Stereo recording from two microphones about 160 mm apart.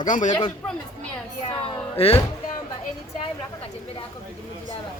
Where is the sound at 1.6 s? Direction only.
40° left (ahead or behind).